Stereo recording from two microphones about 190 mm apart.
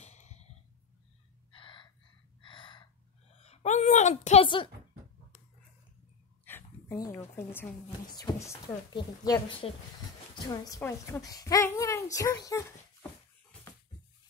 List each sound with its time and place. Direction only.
0.0 s cough: 35° left (ahead or behind)
1.5 s gasp: 25° left (ahead or behind)
3.3 s a woman's voice: 35° left (ahead or behind)
6.4 s a woman's voice: 15° left (ahead or behind)